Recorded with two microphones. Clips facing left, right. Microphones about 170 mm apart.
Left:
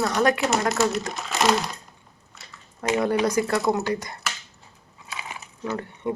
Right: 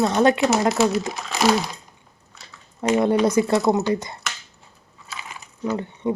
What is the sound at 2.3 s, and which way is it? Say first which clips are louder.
Typing: right 1 dB; centre (ahead or behind).